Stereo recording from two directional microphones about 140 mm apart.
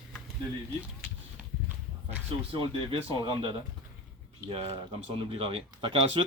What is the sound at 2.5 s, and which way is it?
Speech, 35° right (ahead or behind).